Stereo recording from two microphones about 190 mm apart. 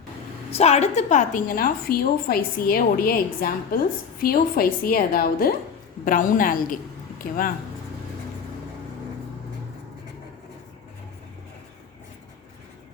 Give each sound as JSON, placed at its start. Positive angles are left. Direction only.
{"t": 0.5, "sound": "a woman's voice", "side_deg": 35}